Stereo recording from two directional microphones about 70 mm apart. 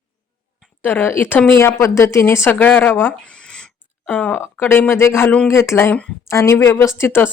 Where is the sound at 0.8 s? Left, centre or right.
Left.